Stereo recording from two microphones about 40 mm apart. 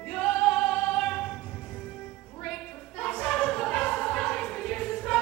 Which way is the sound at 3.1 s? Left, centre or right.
Left.